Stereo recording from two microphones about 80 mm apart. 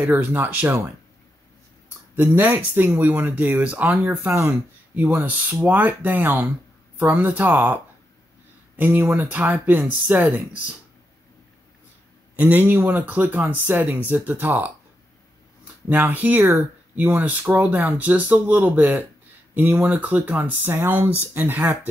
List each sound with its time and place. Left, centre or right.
0.1 s speech: right
2.1 s speech: right
12.4 s speech: right